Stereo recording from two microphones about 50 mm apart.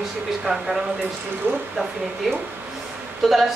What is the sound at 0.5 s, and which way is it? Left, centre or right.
Speech, centre.